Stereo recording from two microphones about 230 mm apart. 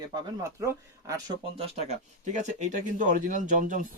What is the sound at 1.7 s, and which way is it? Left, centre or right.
Speech, right.